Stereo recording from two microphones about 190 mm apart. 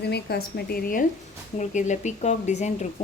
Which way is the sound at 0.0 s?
60° left (ahead or behind).